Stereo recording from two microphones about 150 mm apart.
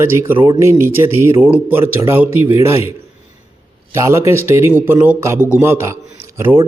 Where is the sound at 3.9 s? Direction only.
20° right (ahead or behind).